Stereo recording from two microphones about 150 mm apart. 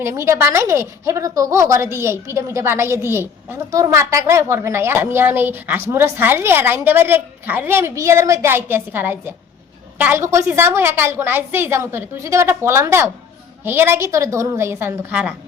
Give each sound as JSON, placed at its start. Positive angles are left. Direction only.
{"t": 0.0, "sound": "a woman's voice", "side_deg": -20}